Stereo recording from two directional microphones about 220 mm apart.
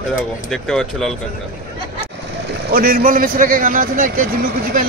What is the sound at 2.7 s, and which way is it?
A man's voice, 40° right (ahead or behind).